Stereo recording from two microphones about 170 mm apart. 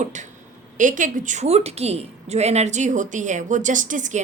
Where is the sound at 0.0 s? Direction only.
45° right (ahead or behind).